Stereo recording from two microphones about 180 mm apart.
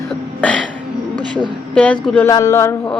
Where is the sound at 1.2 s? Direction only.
25° right (ahead or behind).